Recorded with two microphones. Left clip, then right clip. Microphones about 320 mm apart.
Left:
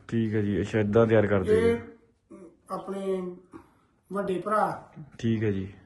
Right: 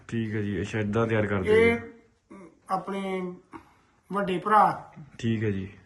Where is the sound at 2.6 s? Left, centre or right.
Centre.